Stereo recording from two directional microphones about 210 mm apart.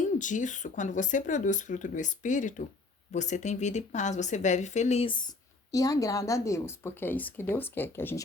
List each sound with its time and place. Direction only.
0.2 s speech: 35° left (ahead or behind); by 8.2 s 10° left (ahead or behind)